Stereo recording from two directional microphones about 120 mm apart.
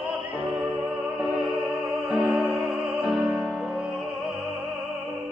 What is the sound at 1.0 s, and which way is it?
Music, 10° right (ahead or behind).